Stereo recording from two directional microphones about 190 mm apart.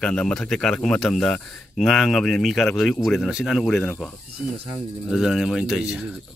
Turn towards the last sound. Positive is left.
turn(degrees=-5)  # may be behind; listen again after turning